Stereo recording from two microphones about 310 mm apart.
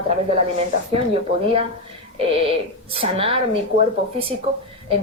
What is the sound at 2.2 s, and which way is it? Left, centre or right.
A woman's voice, centre.